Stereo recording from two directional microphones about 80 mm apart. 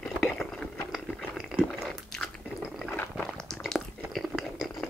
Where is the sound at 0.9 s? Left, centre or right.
Centre.